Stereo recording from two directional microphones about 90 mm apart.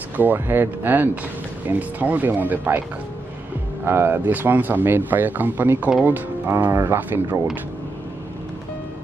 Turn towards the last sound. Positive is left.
turn(degrees=-25)  # may be behind; listen again after turning